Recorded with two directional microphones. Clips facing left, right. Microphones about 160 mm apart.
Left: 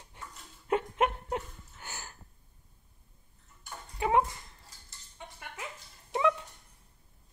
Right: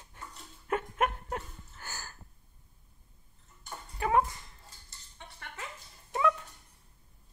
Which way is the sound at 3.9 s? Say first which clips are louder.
Left 1 dB; 20° left (ahead or behind).